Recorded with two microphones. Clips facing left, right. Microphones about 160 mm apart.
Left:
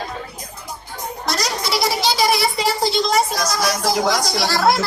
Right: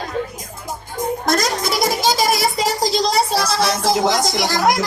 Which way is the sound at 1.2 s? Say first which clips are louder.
Right 2 dB; 50° right (ahead or behind).